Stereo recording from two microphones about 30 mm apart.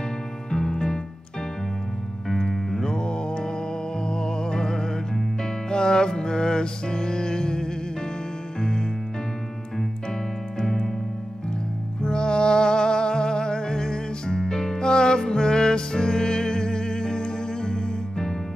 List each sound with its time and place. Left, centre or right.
0.5 s music: left
2.2 s music: centre
2.5 s music: centre
2.9 s music: left
10.6 s music: centre
12.0 s music: left